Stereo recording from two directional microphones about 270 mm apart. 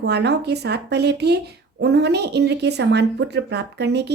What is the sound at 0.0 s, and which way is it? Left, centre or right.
Speech, right.